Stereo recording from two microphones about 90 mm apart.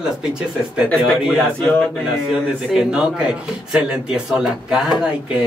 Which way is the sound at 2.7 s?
10° right (ahead or behind).